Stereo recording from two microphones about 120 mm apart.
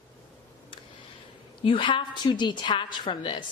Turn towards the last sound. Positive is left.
turn(degrees=45)  # may be behind; listen again after turning